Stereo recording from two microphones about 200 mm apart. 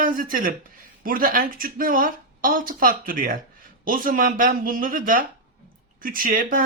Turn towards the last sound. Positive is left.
turn(degrees=-45)  # may be behind; listen again after turning